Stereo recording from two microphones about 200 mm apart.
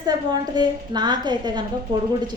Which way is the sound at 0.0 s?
20° right (ahead or behind).